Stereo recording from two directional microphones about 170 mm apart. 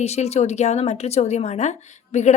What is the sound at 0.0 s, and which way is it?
A woman's voice, 40° left (ahead or behind).